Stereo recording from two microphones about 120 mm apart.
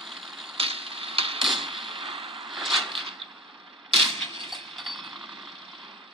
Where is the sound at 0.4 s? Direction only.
50° right (ahead or behind).